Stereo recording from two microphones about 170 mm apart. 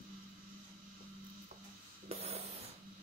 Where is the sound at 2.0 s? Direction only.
35° right (ahead or behind).